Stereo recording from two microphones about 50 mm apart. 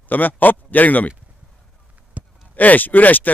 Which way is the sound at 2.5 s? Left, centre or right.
Left.